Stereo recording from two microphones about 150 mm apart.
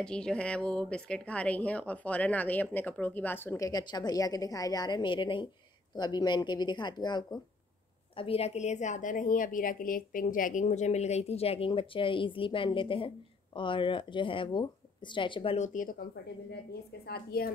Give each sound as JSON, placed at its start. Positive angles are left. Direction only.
{"t": 0.0, "sound": "a woman's voice", "side_deg": 5}
{"t": 8.2, "sound": "a woman's voice", "side_deg": 40}
{"t": 15.5, "sound": "speech", "side_deg": 55}
{"t": 17.0, "sound": "a woman's voice", "side_deg": 90}